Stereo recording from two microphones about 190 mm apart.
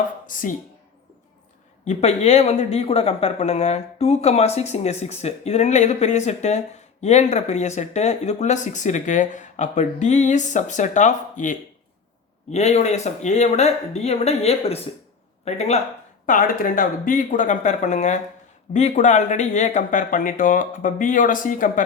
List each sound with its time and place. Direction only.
0.3 s speech: 45° left (ahead or behind)
1.8 s speech: 35° left (ahead or behind)